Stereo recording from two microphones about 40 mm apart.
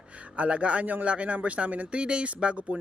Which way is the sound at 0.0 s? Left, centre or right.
Right.